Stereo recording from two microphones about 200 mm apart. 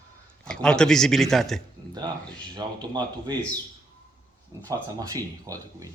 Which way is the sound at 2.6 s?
20° right (ahead or behind).